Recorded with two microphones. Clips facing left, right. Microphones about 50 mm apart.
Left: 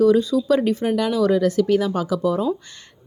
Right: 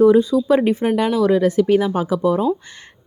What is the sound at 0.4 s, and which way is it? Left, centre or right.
Speech, right.